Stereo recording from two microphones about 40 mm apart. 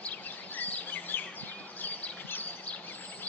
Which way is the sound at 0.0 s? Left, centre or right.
Left.